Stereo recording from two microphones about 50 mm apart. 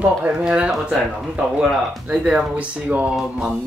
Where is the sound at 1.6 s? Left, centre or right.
Right.